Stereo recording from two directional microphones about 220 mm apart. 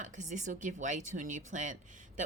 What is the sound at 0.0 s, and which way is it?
Speech, 35° right (ahead or behind).